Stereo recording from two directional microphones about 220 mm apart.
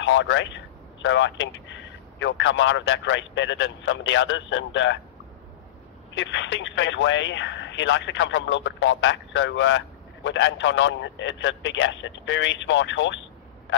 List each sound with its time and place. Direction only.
0.0 s speech: 55° left (ahead or behind)
6.1 s speech: 55° left (ahead or behind)